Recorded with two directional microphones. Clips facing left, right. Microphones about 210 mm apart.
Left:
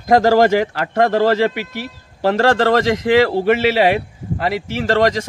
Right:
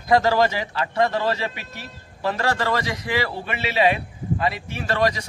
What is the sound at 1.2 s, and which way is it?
A man's voice, 90° left.